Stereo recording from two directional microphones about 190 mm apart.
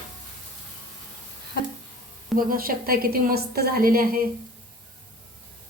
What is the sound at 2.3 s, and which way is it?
A woman's voice, 50° right (ahead or behind).